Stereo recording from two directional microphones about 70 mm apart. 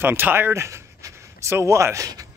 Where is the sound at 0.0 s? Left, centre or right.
Right.